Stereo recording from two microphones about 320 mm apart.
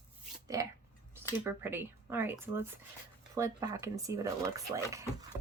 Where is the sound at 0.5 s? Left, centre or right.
Centre.